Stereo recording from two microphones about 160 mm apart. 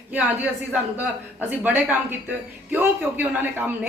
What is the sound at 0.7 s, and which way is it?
Speech, 10° right (ahead or behind).